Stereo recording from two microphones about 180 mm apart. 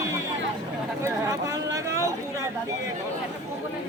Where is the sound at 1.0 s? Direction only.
15° right (ahead or behind).